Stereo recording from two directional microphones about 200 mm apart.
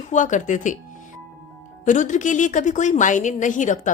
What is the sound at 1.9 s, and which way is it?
A woman's voice, 40° left (ahead or behind).